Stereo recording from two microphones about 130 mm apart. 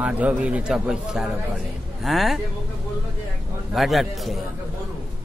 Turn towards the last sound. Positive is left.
turn(degrees=0)  # may be behind; listen again after turning